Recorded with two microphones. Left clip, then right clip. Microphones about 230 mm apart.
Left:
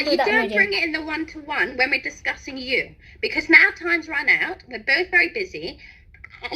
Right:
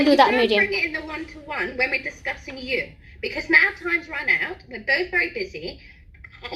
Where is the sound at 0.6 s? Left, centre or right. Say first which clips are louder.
Left 2 dB; left.